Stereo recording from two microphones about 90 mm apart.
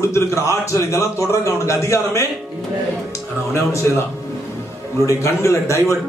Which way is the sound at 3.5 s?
30° left (ahead or behind).